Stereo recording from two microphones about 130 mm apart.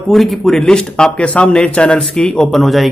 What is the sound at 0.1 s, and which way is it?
Speech, centre (ahead or behind).